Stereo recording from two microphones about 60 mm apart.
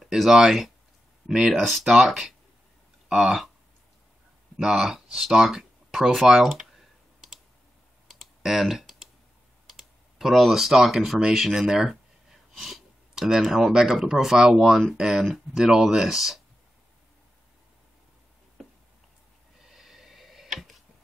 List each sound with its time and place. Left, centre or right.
0.0 s speech: centre
1.5 s speech: centre
4.6 s speech: centre
8.1 s typing: centre
9.7 s speech: centre
19.6 s a sound: centre